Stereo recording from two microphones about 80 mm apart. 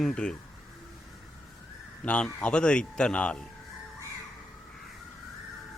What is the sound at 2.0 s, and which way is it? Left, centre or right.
Speech, centre.